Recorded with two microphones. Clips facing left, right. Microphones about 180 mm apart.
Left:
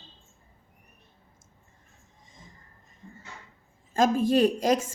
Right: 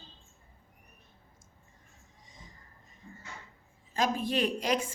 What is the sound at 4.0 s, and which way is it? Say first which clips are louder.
Speech: left 8 dB; 45° left (ahead or behind).